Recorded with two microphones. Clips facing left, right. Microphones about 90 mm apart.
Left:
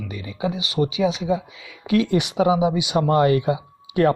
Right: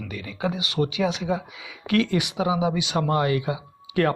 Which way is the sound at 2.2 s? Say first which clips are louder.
Left 6 dB; 35° left (ahead or behind).